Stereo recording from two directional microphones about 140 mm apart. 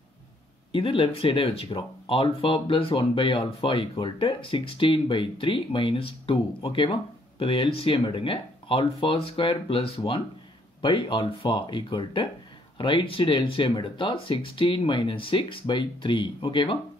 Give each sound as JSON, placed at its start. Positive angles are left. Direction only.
{"t": 0.7, "sound": "speech", "side_deg": 40}